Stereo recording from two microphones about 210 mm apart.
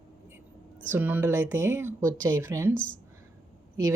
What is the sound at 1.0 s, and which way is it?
A woman's voice, 5° right (ahead or behind).